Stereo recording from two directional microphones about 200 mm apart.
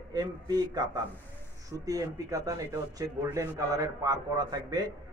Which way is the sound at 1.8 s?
15° right (ahead or behind).